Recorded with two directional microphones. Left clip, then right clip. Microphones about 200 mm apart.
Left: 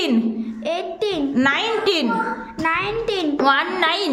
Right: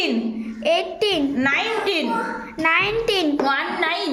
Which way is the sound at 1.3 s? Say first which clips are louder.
Left 2 dB; 60° left (ahead or behind).